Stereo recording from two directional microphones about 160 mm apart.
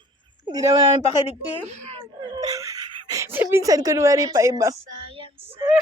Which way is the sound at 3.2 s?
15° right (ahead or behind).